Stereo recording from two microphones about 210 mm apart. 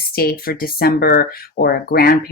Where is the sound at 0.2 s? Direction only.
45° left (ahead or behind).